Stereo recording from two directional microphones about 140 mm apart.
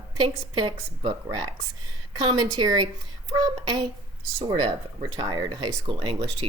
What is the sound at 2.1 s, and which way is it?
Speech, 30° right (ahead or behind).